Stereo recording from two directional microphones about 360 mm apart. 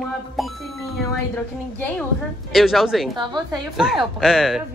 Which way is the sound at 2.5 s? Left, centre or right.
Centre.